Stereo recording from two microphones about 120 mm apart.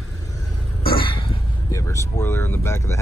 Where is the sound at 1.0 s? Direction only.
45° left (ahead or behind).